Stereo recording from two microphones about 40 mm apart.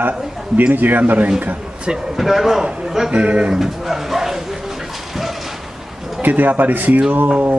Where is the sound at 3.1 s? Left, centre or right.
Right.